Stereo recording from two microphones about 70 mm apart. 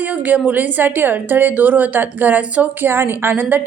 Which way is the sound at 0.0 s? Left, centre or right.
Right.